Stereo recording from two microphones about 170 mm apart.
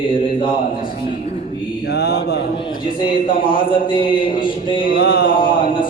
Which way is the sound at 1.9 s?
70° left (ahead or behind).